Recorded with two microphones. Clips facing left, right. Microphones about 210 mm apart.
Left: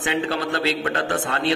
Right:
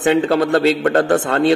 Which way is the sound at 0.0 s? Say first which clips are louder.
Right 9 dB; 50° right (ahead or behind).